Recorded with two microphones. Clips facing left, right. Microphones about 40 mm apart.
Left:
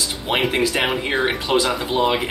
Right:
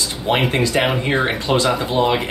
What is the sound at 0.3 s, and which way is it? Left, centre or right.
Speech, centre.